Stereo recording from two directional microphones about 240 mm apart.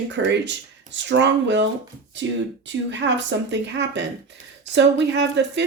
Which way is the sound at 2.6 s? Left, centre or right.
Right.